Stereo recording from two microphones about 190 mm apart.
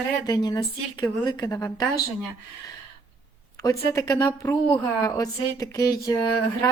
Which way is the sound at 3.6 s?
20° left (ahead or behind).